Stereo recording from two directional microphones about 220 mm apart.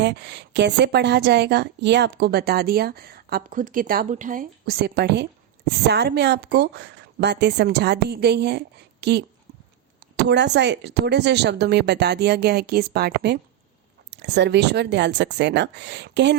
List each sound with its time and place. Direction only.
0.0 s a woman's voice: 50° right (ahead or behind)